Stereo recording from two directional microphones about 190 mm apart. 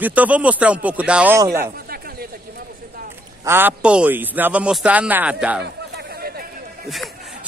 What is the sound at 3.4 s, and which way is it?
A man's voice, 10° right (ahead or behind).